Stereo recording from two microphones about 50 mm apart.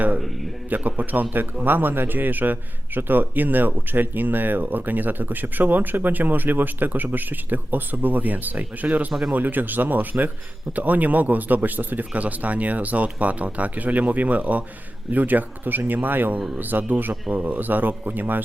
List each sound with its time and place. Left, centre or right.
0.7 s a man's voice: right